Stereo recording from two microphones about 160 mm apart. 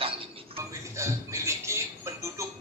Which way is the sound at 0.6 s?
20° right (ahead or behind).